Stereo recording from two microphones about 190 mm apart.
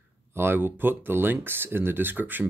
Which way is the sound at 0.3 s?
10° right (ahead or behind).